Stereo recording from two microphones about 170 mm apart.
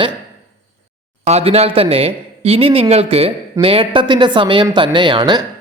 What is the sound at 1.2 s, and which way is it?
A woman's voice, 40° right (ahead or behind).